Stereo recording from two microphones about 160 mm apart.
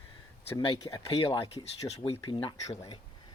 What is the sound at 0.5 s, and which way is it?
Speech, 25° left (ahead or behind).